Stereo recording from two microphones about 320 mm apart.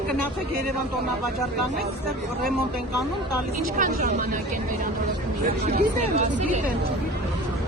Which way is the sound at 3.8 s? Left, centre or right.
Right.